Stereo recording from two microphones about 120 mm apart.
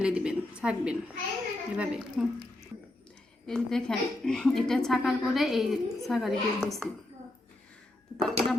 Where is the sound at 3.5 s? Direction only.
5° left (ahead or behind).